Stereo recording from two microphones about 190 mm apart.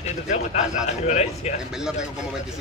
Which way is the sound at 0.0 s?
40° left (ahead or behind).